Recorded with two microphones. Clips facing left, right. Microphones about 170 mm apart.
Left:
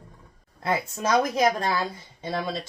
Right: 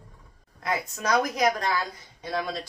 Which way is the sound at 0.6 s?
30° left (ahead or behind).